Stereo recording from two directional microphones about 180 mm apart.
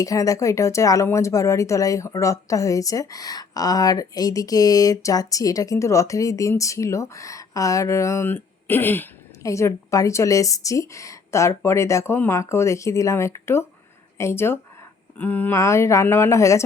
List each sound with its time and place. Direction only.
0.0 s speech: 20° left (ahead or behind)